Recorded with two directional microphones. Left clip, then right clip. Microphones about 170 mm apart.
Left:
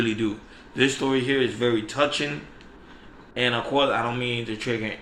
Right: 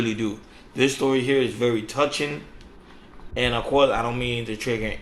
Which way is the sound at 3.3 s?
15° right (ahead or behind).